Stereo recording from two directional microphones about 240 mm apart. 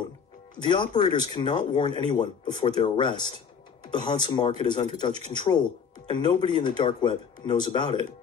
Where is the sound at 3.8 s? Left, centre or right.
Centre.